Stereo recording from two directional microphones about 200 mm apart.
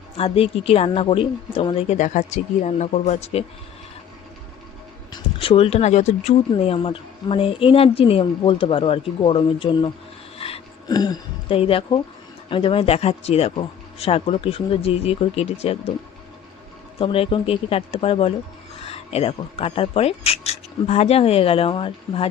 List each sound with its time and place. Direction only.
0.2 s speech: 30° left (ahead or behind)
5.1 s speech: 25° left (ahead or behind)
10.3 s a sound: 30° left (ahead or behind)
12.5 s speech: 25° left (ahead or behind)
17.0 s speech: 25° left (ahead or behind)